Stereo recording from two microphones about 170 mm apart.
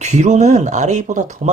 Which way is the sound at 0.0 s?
45° right (ahead or behind).